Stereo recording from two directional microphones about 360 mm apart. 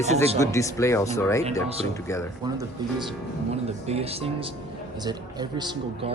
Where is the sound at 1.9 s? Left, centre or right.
Centre.